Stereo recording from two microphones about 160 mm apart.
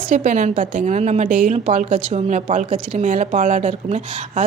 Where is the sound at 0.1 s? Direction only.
50° right (ahead or behind).